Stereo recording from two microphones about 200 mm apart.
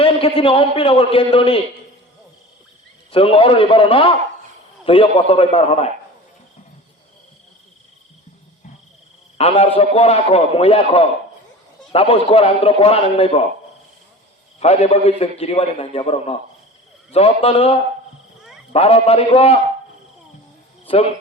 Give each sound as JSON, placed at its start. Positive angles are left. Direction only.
{"t": 0.0, "sound": "a man's voice", "side_deg": 30}
{"t": 3.1, "sound": "a man's voice", "side_deg": 25}
{"t": 9.4, "sound": "a man's voice", "side_deg": 30}
{"t": 14.6, "sound": "a man's voice", "side_deg": 30}
{"t": 20.8, "sound": "speech", "side_deg": 25}